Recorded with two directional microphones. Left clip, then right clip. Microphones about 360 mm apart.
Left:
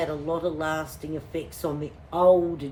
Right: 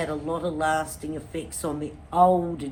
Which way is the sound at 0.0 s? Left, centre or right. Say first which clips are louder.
Left 1 dB; centre.